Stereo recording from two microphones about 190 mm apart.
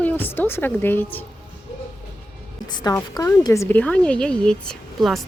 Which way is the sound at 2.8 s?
20° left (ahead or behind).